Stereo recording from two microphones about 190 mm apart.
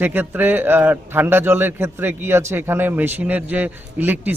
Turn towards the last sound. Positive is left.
turn(degrees=-10)  # may be behind; listen again after turning